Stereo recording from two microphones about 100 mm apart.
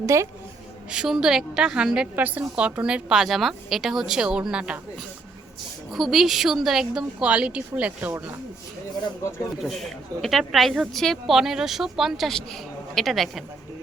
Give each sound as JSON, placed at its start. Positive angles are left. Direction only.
{"t": 0.0, "sound": "a woman's voice", "side_deg": -30}
{"t": 0.9, "sound": "a woman's voice", "side_deg": -5}
{"t": 5.9, "sound": "speech", "side_deg": 0}
{"t": 9.6, "sound": "speech", "side_deg": 0}